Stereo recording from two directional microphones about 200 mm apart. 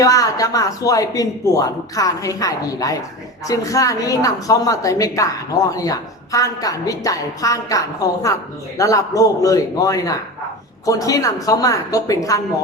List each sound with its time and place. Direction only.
0.0 s a woman's voice: 15° left (ahead or behind)